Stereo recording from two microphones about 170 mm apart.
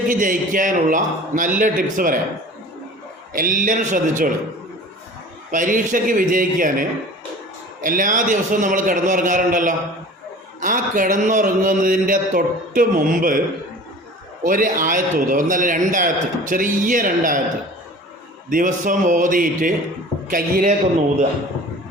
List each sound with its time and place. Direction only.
0.1 s a man's voice: 50° right (ahead or behind)
3.3 s a man's voice: 55° right (ahead or behind)
5.5 s a man's voice: 50° right (ahead or behind)
14.4 s a man's voice: 55° right (ahead or behind)
18.5 s a man's voice: 50° right (ahead or behind)